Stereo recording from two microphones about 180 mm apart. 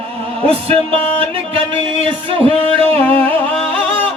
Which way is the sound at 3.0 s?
10° left (ahead or behind).